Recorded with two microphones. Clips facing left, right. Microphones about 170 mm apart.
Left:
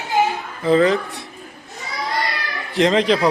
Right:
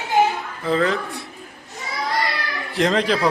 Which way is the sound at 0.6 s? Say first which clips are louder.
Left 5 dB; 5° left (ahead or behind).